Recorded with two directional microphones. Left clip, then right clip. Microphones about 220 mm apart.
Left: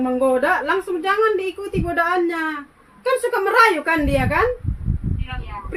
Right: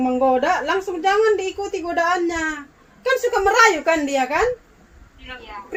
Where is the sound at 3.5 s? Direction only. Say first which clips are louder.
Even; centre (ahead or behind).